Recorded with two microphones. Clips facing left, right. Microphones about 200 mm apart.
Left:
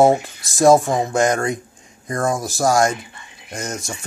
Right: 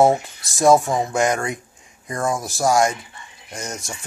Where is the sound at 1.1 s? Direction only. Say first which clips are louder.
Left 3 dB; 40° left (ahead or behind).